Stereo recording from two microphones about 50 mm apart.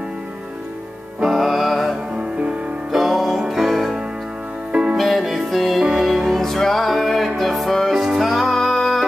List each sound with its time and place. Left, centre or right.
1.2 s music: centre
2.1 s music: right
2.9 s music: centre
4.9 s music: centre